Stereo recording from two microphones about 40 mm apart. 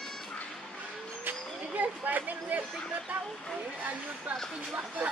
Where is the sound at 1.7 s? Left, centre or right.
Right.